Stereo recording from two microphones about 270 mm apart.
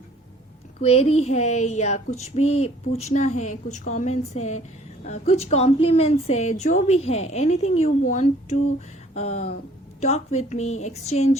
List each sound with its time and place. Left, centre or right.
0.8 s a woman's voice: left